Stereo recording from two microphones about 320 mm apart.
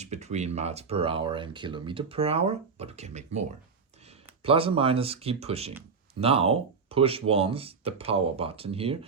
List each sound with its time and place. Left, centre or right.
0.0 s speech: right
4.4 s speech: centre